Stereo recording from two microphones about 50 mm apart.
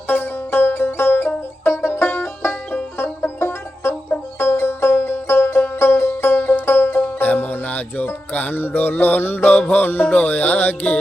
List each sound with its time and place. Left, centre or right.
0.1 s banjo: left
3.0 s music: left
7.2 s music: left